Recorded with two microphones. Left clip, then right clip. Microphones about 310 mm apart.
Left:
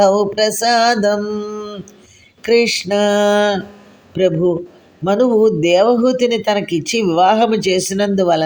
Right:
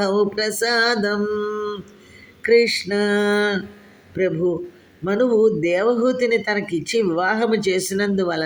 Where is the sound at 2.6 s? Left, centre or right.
Centre.